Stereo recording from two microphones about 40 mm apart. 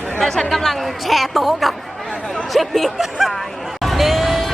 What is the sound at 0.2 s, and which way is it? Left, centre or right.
Speech, centre.